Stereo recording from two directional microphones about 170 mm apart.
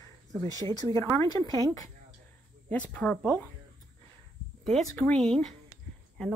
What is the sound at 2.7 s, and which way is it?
Speech, 10° left (ahead or behind).